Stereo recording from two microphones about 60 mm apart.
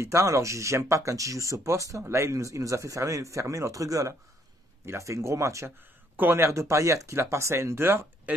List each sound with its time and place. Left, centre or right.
0.0 s speech: right
4.8 s speech: right